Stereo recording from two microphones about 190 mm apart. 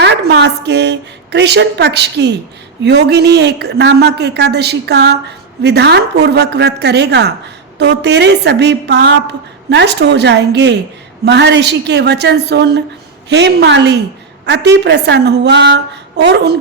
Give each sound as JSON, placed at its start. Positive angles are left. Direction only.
{"t": 0.0, "sound": "a woman's voice", "side_deg": -65}